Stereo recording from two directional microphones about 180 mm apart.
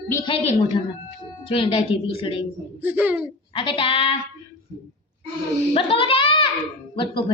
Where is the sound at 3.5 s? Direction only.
30° left (ahead or behind).